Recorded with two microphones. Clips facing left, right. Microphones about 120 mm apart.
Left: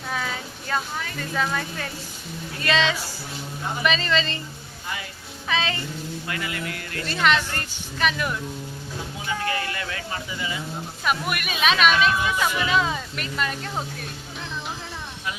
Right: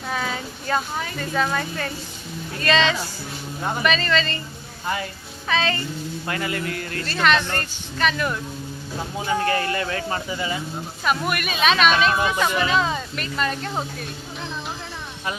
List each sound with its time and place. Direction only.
0.1 s a sound: centre (ahead or behind)
1.4 s speech: centre (ahead or behind); by 4.4 s 20° left (ahead or behind)
5.5 s speech: 15° left (ahead or behind)
6.2 s speech: 40° right (ahead or behind)
7.1 s speech: 15° left (ahead or behind)
9.2 s speech: 40° right (ahead or behind)
11.0 s speech: 5° left (ahead or behind)
11.9 s speech: 40° right (ahead or behind)
12.4 s speech: 5° left (ahead or behind)